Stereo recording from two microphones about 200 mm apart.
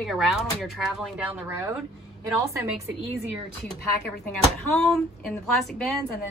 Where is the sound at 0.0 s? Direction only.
Centre (ahead or behind).